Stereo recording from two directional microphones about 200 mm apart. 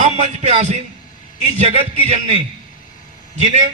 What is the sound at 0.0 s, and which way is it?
A man's voice, 35° right (ahead or behind).